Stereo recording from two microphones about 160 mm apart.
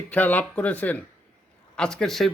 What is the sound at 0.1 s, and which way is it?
A man's voice, 10° left (ahead or behind).